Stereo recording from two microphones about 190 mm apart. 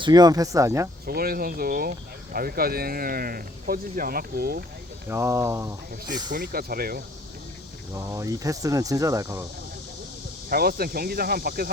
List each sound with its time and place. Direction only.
0.0 s speech: 20° right (ahead or behind)
1.0 s speech: 55° right (ahead or behind)
5.0 s speech: 15° right (ahead or behind)
6.3 s speech: 50° right (ahead or behind)
7.9 s speech: 15° right (ahead or behind)
10.5 s speech: 55° right (ahead or behind)